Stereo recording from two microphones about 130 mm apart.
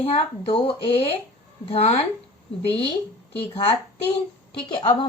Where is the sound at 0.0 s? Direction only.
45° left (ahead or behind).